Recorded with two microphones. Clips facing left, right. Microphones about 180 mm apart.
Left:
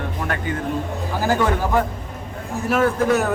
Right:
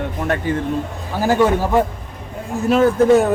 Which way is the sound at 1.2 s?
20° right (ahead or behind).